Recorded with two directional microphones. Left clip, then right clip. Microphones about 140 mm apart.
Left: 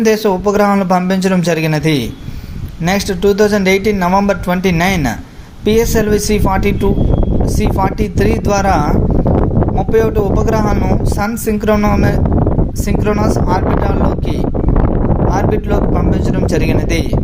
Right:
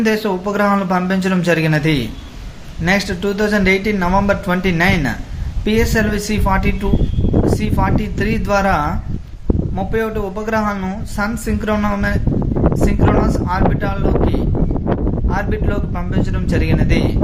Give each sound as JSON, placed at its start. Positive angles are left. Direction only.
{"t": 0.0, "sound": "speech", "side_deg": 35}
{"t": 9.9, "sound": "speech", "side_deg": 35}
{"t": 15.3, "sound": "speech", "side_deg": 35}